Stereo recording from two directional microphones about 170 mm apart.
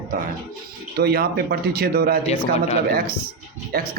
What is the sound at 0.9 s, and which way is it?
Speech, 65° right (ahead or behind).